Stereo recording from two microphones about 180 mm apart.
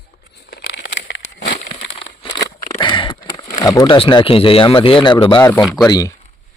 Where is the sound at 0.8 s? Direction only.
80° left.